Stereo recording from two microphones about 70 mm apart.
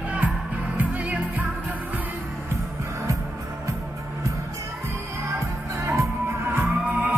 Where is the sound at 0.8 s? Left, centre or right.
Right.